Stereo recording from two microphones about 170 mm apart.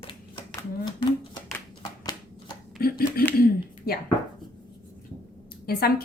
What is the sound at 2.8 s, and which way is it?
Speech, 60° left (ahead or behind).